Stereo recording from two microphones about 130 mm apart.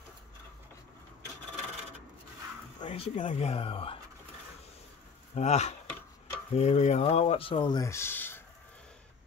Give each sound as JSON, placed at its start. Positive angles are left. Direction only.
{"t": 2.8, "sound": "speech", "side_deg": 45}
{"t": 5.3, "sound": "speech", "side_deg": 60}
{"t": 7.8, "sound": "speech", "side_deg": 20}